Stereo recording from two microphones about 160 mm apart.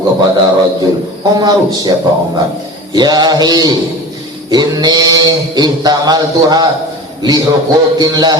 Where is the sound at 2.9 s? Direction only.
25° right (ahead or behind).